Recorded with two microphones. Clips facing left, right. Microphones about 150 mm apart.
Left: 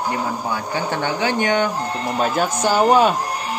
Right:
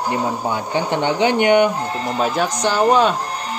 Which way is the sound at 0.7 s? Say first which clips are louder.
Right 5 dB; 20° right (ahead or behind).